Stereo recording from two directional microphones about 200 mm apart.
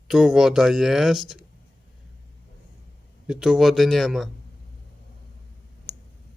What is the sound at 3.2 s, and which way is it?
Speech, 5° right (ahead or behind).